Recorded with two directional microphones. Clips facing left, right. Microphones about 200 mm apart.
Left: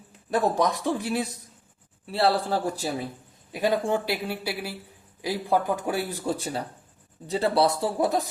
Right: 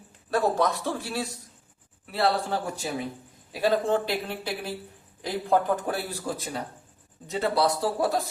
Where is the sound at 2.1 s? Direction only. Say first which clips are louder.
Left 2 dB; 30° left (ahead or behind).